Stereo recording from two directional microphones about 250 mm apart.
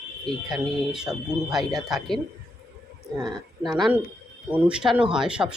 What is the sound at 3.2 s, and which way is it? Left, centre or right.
Speech, centre.